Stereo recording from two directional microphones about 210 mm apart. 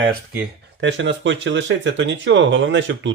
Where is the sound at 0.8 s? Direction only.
60° right (ahead or behind).